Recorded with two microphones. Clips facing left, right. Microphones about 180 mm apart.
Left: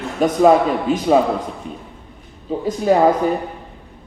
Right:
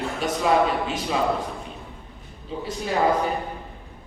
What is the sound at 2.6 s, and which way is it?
Speech, 45° left (ahead or behind).